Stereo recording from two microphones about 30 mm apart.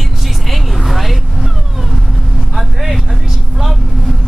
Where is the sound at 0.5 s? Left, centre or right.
Centre.